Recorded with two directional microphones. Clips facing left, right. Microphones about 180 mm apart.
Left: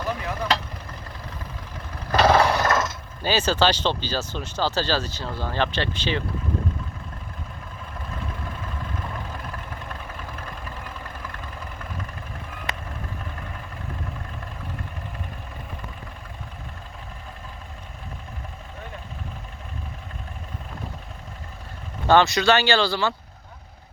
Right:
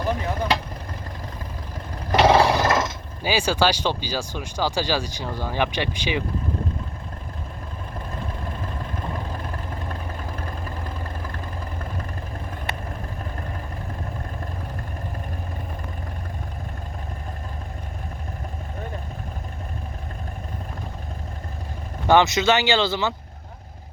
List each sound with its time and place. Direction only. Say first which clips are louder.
0.0 s vehicle: right 3 dB; 30° right (ahead or behind)
2.1 s a sound: right 2 dB; 10° right (ahead or behind)
3.2 s speech: even; 10° right (ahead or behind)
8.6 s vehicle: right 2 dB; 30° right (ahead or behind)
22.0 s speech: even; 15° right (ahead or behind)